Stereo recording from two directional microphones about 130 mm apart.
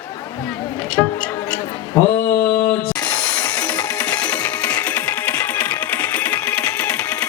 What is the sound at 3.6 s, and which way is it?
Music, 10° left (ahead or behind).